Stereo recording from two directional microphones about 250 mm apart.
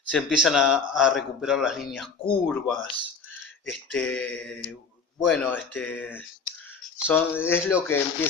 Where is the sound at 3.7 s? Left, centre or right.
Centre.